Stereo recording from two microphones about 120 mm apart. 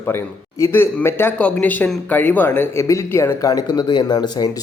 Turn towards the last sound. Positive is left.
turn(degrees=35)  # may be behind; listen again after turning